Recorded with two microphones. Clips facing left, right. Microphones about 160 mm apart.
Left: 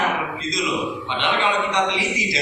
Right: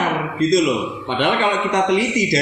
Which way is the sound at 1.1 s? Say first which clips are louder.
Right 5 dB; 50° right (ahead or behind).